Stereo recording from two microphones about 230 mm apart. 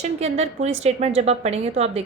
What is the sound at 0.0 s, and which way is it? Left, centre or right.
A woman's voice, right.